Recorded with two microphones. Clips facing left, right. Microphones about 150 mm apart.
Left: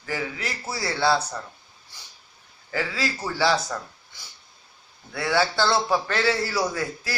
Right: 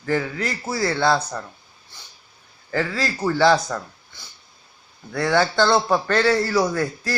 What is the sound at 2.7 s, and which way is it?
Speech, 50° right (ahead or behind).